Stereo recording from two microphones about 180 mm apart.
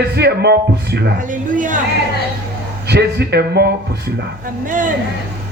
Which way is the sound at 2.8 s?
65° right (ahead or behind).